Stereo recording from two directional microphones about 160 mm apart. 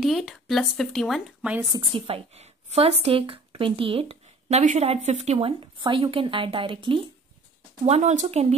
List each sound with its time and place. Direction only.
0.0 s speech: centre (ahead or behind)
1.6 s speech: 25° right (ahead or behind)
7.8 s speech: 45° right (ahead or behind)